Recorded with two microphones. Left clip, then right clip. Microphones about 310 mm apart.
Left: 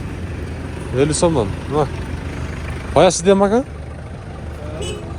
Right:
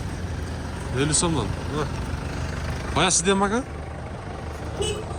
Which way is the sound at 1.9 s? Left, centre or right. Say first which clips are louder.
Left 3 dB; right.